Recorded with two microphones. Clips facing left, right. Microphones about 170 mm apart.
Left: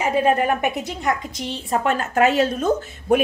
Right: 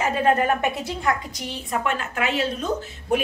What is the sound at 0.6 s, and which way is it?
A woman's voice, 20° left (ahead or behind).